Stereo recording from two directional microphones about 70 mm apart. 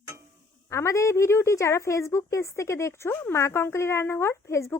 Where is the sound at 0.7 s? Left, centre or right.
Left.